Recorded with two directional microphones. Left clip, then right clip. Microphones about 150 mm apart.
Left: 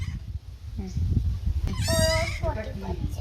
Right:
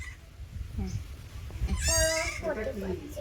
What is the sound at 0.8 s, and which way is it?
Speech, 30° left (ahead or behind).